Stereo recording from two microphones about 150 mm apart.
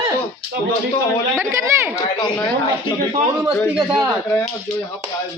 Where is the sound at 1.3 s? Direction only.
15° right (ahead or behind).